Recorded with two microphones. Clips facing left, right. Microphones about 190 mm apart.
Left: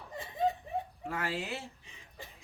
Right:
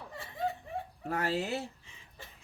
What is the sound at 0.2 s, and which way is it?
Snicker, 20° left (ahead or behind).